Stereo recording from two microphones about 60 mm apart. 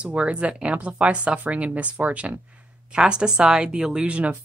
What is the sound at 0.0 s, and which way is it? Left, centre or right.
Speech, centre.